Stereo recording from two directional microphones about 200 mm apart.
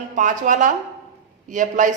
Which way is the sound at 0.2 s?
40° right (ahead or behind).